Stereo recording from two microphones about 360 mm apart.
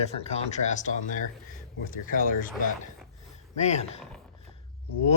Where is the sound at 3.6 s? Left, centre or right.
Centre.